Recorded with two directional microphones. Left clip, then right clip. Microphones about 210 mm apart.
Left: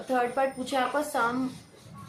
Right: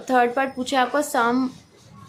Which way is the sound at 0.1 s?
45° right (ahead or behind).